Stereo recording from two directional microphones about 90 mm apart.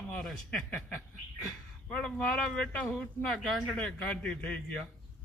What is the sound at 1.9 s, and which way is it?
A man's voice, 15° left (ahead or behind).